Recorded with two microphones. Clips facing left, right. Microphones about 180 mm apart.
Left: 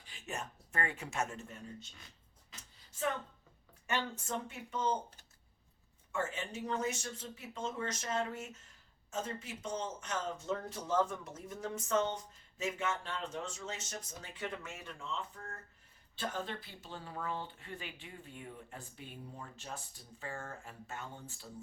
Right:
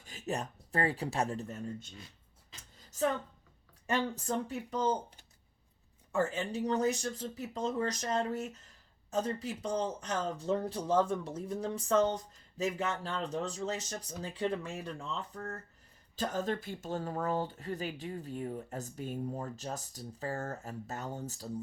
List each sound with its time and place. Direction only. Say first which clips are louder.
0.0 s speech: right 7 dB; 40° right (ahead or behind)
2.9 s a sound: right 6 dB; 40° right (ahead or behind)
3.8 s speech: right 5 dB; 35° right (ahead or behind)
6.1 s speech: right 6 dB; 35° right (ahead or behind)